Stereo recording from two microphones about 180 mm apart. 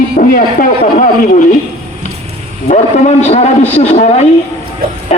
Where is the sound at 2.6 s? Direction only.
40° left (ahead or behind).